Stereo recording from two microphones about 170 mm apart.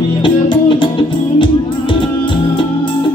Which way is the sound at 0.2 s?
30° left (ahead or behind).